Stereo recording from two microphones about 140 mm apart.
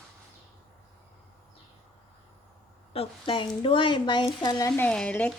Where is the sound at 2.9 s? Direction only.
35° left (ahead or behind).